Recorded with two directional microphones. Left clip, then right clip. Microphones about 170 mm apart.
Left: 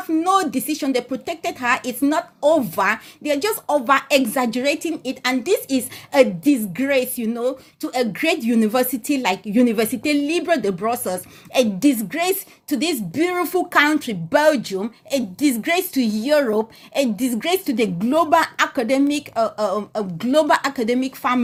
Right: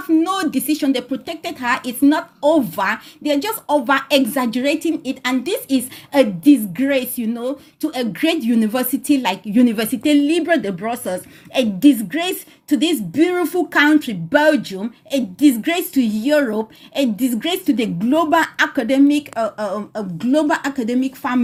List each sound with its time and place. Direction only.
0.1 s a woman's voice: 30° left (ahead or behind)